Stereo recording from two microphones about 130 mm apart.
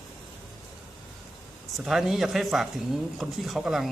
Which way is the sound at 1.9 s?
Centre (ahead or behind).